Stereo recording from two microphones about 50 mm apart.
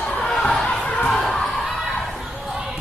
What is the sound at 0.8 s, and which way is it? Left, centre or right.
Crowd, left.